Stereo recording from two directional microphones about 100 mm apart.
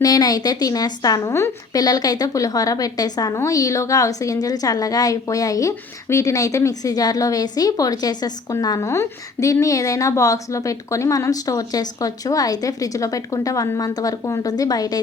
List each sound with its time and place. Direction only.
0.0 s a woman's voice: 40° left (ahead or behind)